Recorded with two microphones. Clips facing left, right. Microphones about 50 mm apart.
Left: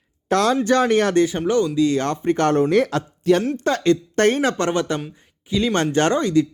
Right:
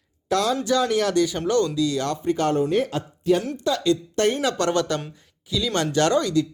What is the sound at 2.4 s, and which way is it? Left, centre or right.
Speech, left.